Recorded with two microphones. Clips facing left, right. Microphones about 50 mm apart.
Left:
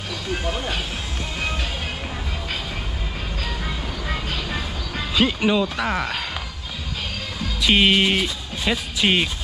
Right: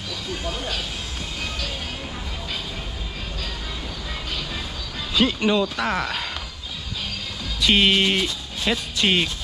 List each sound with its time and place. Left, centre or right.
4.1 s vehicle: left
5.1 s speech: centre
7.6 s speech: centre